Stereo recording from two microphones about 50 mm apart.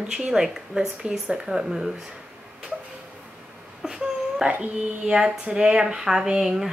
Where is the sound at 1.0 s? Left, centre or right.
Right.